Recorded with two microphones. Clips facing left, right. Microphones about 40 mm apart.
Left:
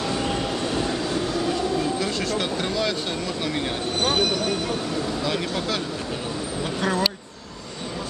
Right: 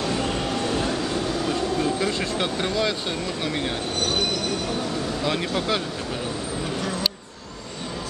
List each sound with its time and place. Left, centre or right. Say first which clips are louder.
0.0 s train: even; centre
2.0 s speech: even; centre
5.2 s speech: right 1 dB; centre